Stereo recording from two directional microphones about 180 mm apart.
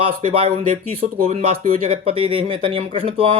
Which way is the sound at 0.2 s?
35° right (ahead or behind).